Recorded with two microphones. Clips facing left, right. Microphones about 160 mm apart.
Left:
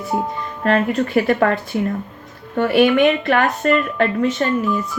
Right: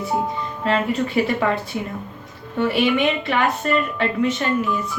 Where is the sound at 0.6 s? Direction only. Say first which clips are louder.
Left 4 dB; 50° left (ahead or behind).